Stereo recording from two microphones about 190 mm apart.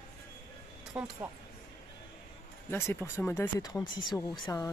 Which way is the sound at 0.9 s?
5° right (ahead or behind).